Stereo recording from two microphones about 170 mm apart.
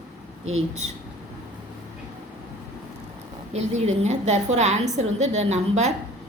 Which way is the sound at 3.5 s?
40° right (ahead or behind).